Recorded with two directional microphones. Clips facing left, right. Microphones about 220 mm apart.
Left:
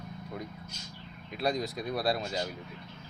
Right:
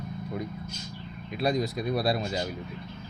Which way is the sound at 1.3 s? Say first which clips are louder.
Right 4 dB; 5° right (ahead or behind).